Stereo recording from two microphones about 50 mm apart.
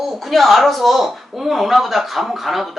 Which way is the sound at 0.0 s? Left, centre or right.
Centre.